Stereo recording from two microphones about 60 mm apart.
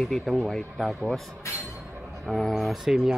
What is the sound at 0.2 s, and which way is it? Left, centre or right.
Speech, centre.